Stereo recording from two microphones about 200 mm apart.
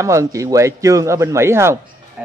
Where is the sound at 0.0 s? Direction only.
15° right (ahead or behind).